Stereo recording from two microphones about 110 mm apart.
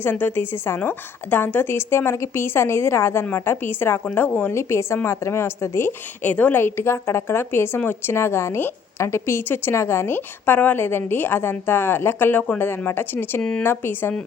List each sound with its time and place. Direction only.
0.0 s a woman's voice: 15° left (ahead or behind)